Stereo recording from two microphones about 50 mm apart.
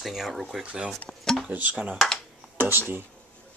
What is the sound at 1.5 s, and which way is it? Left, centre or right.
Speech, right.